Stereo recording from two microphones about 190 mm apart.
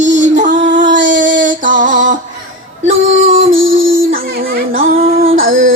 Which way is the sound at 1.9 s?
80° right.